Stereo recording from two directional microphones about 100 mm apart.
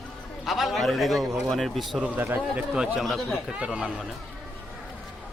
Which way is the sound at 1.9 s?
10° right (ahead or behind).